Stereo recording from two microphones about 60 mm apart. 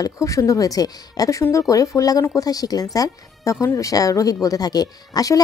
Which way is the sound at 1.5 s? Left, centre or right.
Left.